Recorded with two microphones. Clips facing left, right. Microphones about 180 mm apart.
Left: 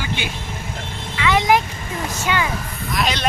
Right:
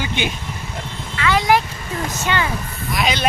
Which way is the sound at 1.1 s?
15° left (ahead or behind).